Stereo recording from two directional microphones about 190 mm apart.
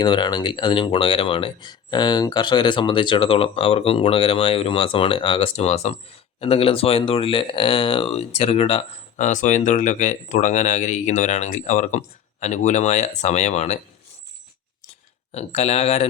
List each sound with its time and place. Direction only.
0.0 s speech: 25° left (ahead or behind)
15.3 s speech: 35° left (ahead or behind)